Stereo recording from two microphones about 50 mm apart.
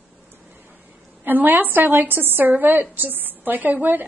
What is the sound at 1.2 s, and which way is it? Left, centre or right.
A woman's voice, right.